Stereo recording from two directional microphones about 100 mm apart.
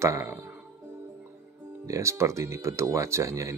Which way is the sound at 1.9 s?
30° right (ahead or behind).